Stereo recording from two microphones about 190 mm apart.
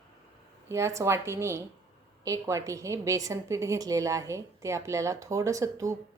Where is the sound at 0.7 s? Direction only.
15° right (ahead or behind).